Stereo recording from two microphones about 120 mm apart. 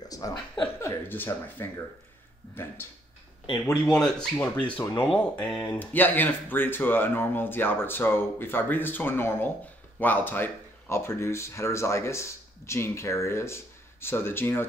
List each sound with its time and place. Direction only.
0.0 s chuckle: 30° left (ahead or behind)
0.7 s speech: 20° left (ahead or behind)
3.8 s speech: 5° left (ahead or behind)